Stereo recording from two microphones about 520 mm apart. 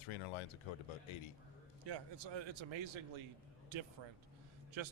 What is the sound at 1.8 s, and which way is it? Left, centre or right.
A man's voice, right.